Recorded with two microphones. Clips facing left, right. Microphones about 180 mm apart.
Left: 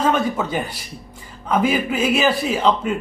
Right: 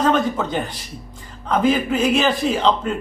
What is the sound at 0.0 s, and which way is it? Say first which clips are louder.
A man's voice: right 1 dB; 10° left (ahead or behind).